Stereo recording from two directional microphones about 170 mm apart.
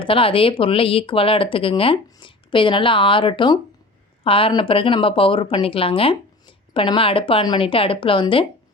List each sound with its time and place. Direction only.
0.0 s a woman's voice: 30° left (ahead or behind)